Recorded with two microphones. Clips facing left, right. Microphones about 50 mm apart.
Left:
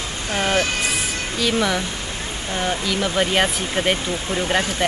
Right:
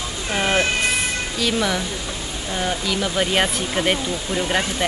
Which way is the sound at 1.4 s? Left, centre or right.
Centre.